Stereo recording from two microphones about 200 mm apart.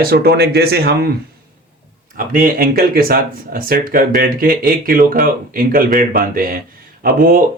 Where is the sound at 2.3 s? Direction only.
45° right (ahead or behind).